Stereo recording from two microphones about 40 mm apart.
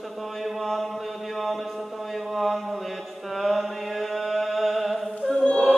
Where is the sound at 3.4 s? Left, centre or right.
Centre.